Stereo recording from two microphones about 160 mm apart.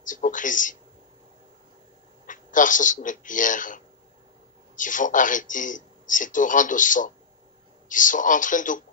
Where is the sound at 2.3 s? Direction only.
55° left (ahead or behind).